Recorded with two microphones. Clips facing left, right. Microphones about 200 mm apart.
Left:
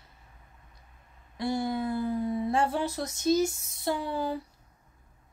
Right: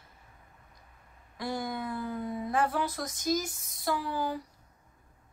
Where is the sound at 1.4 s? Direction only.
25° left (ahead or behind).